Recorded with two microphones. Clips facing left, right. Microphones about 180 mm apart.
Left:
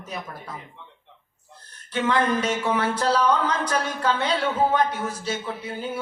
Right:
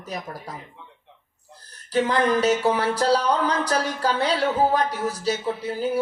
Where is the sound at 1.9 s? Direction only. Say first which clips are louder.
Right 2 dB; 35° right (ahead or behind).